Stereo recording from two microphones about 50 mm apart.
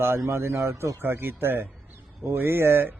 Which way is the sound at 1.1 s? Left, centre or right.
Right.